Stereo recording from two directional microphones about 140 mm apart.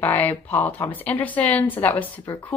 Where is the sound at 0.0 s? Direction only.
15° left (ahead or behind).